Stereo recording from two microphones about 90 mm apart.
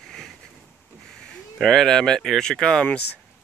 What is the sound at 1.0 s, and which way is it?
Speech, 10° left (ahead or behind).